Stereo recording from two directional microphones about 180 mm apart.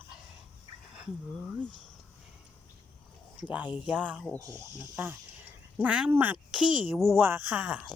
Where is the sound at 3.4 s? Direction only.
10° right (ahead or behind).